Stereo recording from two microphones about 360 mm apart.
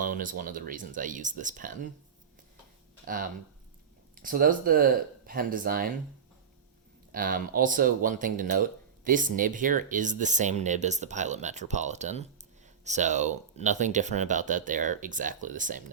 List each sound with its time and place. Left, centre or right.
0.0 s speech: right
4.2 s speech: right
7.1 s speech: right